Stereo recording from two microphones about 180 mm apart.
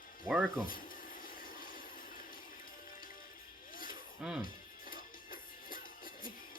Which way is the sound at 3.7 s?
50° left (ahead or behind).